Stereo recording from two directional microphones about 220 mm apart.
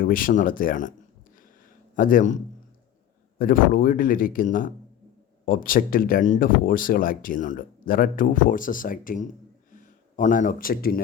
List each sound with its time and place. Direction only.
0.0 s speech: 40° left (ahead or behind)
2.0 s speech: 40° left (ahead or behind)